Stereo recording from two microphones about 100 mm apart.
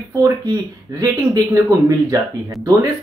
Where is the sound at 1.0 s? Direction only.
40° right (ahead or behind).